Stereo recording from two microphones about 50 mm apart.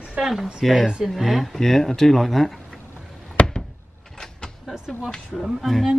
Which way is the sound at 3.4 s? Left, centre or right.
Left.